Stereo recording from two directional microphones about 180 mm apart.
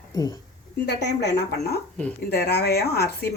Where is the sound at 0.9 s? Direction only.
70° left (ahead or behind).